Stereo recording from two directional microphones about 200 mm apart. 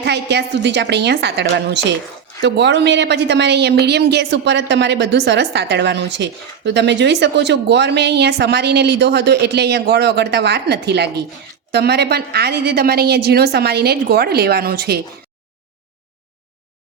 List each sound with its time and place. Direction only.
0.0 s a woman's voice: 55° right (ahead or behind)